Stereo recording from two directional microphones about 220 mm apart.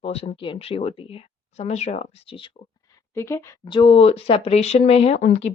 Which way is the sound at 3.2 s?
10° left (ahead or behind).